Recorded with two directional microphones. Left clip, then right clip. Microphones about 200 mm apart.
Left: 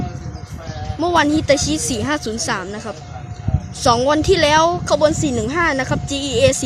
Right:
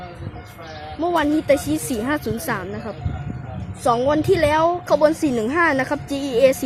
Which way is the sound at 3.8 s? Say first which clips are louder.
Left 3 dB; 15° left (ahead or behind).